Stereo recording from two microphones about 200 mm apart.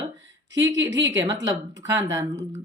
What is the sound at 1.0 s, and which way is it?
Speech, 20° right (ahead or behind).